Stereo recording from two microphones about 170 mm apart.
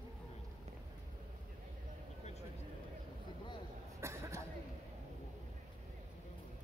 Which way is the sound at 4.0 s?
15° right (ahead or behind).